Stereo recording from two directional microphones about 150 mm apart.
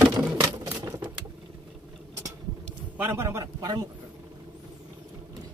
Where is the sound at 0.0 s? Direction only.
10° right (ahead or behind).